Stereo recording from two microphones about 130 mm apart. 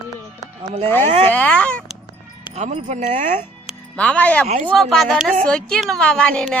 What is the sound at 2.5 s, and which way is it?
Speech, 60° right (ahead or behind).